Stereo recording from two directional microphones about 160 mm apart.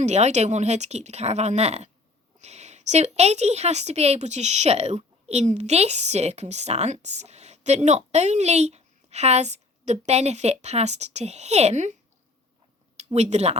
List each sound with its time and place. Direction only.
0.0 s a woman's voice: 45° right (ahead or behind)
13.0 s speech: 40° right (ahead or behind)